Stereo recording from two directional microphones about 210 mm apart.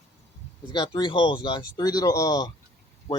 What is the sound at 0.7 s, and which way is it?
Speech, 20° left (ahead or behind).